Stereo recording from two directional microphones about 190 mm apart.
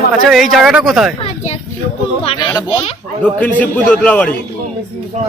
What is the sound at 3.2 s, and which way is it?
A man's voice, 5° left (ahead or behind).